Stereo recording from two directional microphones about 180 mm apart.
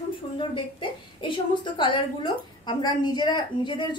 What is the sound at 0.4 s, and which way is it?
A woman's voice, 25° left (ahead or behind).